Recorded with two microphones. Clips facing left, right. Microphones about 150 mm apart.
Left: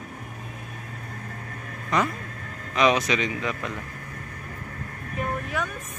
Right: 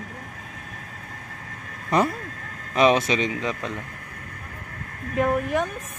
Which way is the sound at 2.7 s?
30° right (ahead or behind).